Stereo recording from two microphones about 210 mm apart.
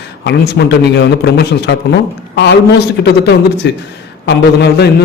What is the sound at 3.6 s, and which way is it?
A man's voice, 55° left (ahead or behind).